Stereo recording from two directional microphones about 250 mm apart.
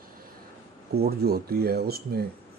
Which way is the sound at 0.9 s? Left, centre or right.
Right.